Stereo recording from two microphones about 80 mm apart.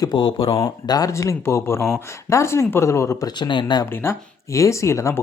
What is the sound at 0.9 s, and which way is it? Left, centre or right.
Speech, left.